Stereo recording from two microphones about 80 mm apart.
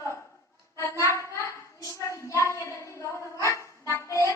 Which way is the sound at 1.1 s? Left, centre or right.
Left.